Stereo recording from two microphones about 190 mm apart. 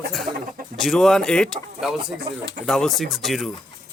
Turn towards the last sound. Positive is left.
turn(degrees=0)  # may be behind; listen again after turning